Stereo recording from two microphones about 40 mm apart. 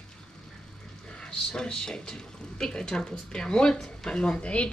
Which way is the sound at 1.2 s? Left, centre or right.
Centre.